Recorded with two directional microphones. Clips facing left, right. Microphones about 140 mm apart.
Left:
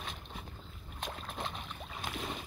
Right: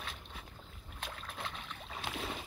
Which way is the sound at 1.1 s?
20° left (ahead or behind).